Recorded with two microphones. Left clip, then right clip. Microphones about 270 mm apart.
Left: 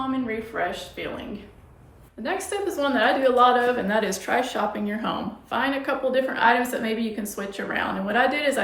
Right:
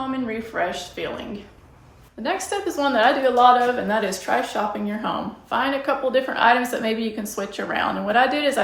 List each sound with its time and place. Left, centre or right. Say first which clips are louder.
0.3 s speech: right 2 dB; right
2.2 s a woman's voice: right 2 dB; centre